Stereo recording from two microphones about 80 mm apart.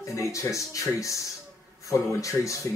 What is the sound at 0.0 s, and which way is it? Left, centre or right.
Speech, left.